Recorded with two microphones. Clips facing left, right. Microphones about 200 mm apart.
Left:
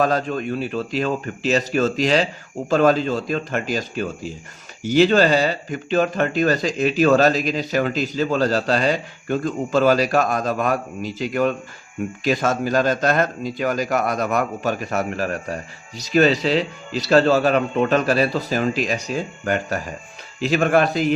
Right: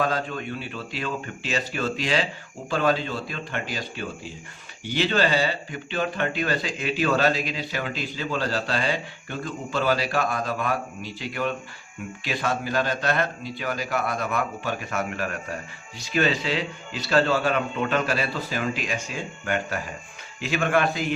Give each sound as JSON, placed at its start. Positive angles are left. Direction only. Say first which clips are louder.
{"t": 0.0, "sound": "speech", "louder": "left 6 dB", "side_deg": 40}